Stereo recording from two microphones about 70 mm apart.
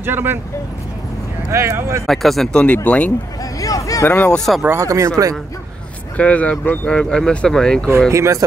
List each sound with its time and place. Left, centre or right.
0.0 s speech: right
1.5 s speech: right
2.0 s speech: centre
2.5 s speech: left
3.5 s a sound: left
4.0 s speech: left
4.7 s speech: right
6.1 s speech: centre
6.9 s speech: centre
8.1 s speech: right